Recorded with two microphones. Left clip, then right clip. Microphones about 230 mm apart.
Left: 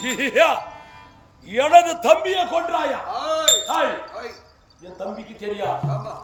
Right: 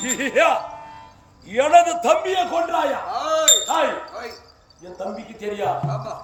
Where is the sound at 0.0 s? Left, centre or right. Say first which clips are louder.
Left 1 dB; left.